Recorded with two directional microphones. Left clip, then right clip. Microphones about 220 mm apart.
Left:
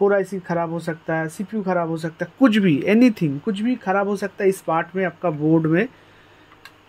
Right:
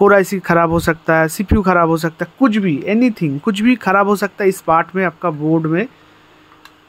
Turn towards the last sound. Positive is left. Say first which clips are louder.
# right 2 dB
turn(degrees=-5)  # may be behind; listen again after turning